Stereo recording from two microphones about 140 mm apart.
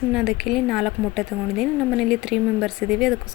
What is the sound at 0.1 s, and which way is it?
A woman's voice, centre (ahead or behind).